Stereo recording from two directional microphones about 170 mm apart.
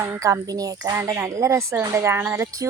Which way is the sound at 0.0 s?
15° right (ahead or behind).